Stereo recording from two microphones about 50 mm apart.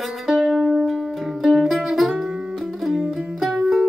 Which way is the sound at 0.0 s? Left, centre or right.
Centre.